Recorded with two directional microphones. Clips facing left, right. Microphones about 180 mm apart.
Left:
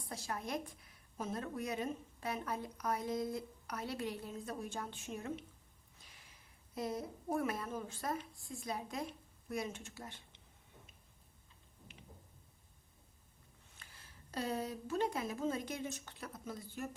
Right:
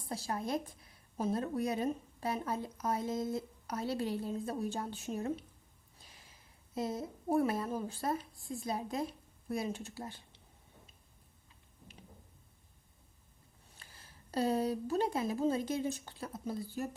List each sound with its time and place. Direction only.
0.1 s a woman's voice: 30° right (ahead or behind)
6.7 s a woman's voice: 25° right (ahead or behind)
13.8 s a sound: 35° right (ahead or behind)
14.3 s a woman's voice: 35° right (ahead or behind)